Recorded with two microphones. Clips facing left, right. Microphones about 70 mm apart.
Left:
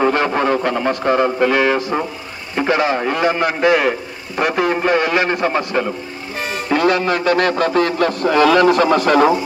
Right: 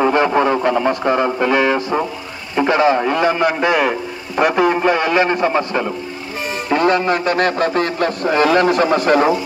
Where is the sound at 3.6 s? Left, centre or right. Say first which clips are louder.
Left 1 dB; centre.